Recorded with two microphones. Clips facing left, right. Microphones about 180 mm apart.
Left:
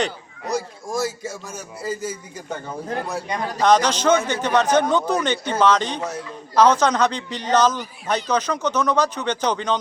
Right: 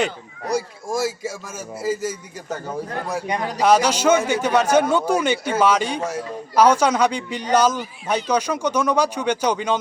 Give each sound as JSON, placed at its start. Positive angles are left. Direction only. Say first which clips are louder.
{"t": 0.5, "sound": "a man's voice", "louder": "right 2 dB", "side_deg": -10}
{"t": 3.1, "sound": "a man's voice", "louder": "right 2 dB", "side_deg": -10}